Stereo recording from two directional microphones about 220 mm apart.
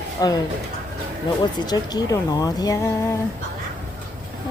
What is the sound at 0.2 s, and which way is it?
Speech, 15° left (ahead or behind).